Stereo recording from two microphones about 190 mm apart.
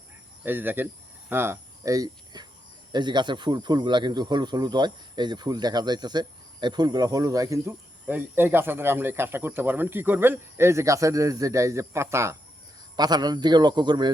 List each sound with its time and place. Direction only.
0.4 s a man's voice: 10° right (ahead or behind)